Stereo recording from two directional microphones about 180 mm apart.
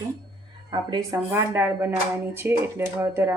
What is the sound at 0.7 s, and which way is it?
Speech, 25° right (ahead or behind).